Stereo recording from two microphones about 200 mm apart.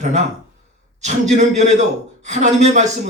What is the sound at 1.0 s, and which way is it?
Speech, 35° right (ahead or behind).